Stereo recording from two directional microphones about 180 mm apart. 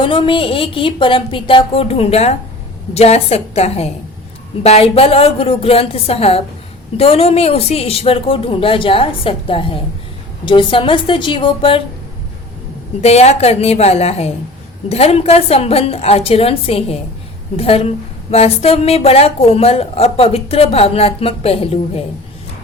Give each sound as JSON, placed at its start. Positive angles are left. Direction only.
{"t": 0.0, "sound": "a woman's voice", "side_deg": 30}
{"t": 13.0, "sound": "a woman's voice", "side_deg": 35}